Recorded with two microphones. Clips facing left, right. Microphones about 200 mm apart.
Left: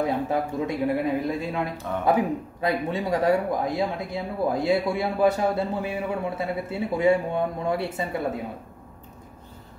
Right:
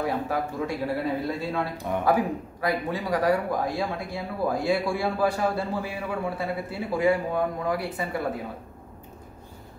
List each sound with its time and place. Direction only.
0.0 s a man's voice: 20° left (ahead or behind)